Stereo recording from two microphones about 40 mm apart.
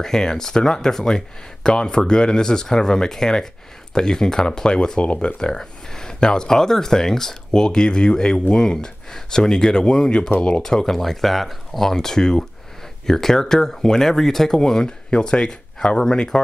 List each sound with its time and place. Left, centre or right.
0.0 s speech: centre
10.6 s speech: centre